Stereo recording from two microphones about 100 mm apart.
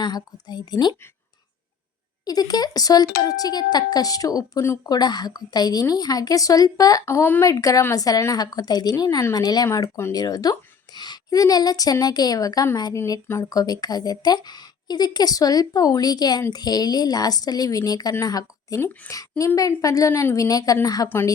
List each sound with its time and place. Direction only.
0.0 s a woman's voice: 45° left (ahead or behind)
2.2 s a woman's voice: 40° left (ahead or behind)
4.9 s a woman's voice: 45° left (ahead or behind)
7.0 s a woman's voice: 25° left (ahead or behind)
7.4 s a woman's voice: 35° left (ahead or behind)